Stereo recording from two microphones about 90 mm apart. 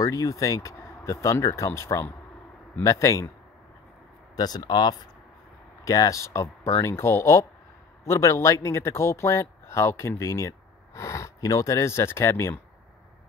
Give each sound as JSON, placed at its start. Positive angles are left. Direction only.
{"t": 0.0, "sound": "speech", "side_deg": 35}
{"t": 4.4, "sound": "speech", "side_deg": 50}
{"t": 5.9, "sound": "speech", "side_deg": 40}